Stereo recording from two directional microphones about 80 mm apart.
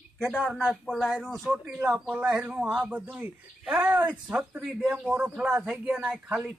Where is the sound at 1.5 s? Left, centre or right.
Centre.